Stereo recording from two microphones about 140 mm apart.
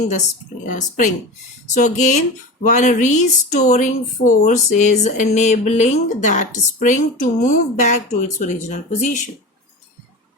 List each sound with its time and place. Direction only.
0.6 s speech: 70° left (ahead or behind)